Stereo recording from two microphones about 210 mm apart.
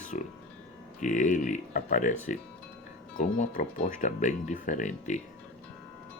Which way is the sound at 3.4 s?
35° left (ahead or behind).